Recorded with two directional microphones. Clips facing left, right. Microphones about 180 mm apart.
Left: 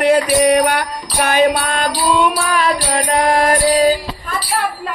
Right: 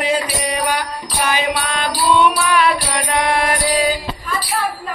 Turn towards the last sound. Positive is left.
turn(degrees=40)  # may be behind; listen again after turning